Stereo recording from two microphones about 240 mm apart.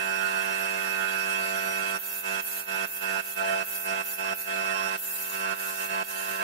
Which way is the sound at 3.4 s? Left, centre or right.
Left.